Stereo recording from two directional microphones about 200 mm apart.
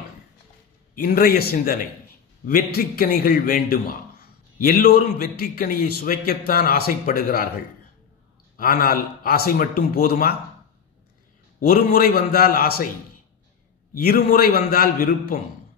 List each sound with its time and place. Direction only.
0.9 s a man's voice: 50° left (ahead or behind)
8.5 s speech: 45° left (ahead or behind)
11.6 s speech: 50° left (ahead or behind)
13.9 s speech: 50° left (ahead or behind)